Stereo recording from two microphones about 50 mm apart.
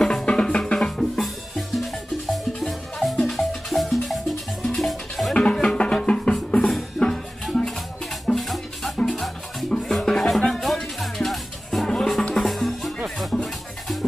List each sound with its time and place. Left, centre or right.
0.0 s drum: centre
0.7 s music: centre
5.3 s music: centre
7.0 s music: centre
8.4 s music: centre